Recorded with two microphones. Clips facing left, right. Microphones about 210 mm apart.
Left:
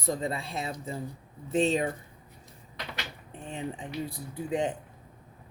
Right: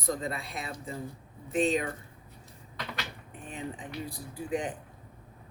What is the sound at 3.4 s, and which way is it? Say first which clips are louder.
Speech: left 3 dB; 25° left (ahead or behind).